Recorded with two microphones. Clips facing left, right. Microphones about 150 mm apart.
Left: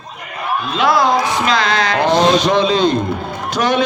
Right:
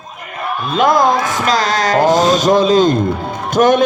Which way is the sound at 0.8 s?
45° right (ahead or behind).